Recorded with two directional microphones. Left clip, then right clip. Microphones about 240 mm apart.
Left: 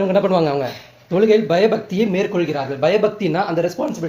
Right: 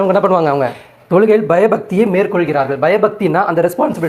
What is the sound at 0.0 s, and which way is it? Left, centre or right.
Speech, centre.